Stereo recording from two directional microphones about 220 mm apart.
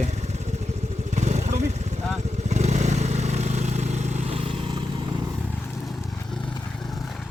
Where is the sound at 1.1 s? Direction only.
30° right (ahead or behind).